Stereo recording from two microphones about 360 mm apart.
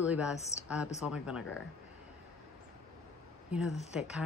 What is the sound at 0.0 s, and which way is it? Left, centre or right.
Speech, centre.